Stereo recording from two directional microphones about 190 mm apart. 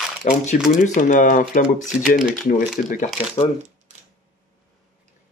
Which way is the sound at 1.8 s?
5° right (ahead or behind).